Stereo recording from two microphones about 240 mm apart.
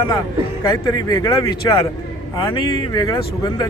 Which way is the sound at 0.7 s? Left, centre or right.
Centre.